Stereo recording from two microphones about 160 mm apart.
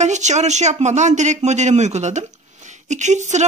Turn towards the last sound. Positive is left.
turn(degrees=-45)  # may be behind; listen again after turning